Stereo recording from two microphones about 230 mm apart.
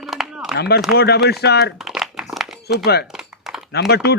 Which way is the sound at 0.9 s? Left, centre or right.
Left.